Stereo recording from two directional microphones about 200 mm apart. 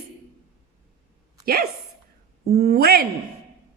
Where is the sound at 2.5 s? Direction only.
50° right (ahead or behind).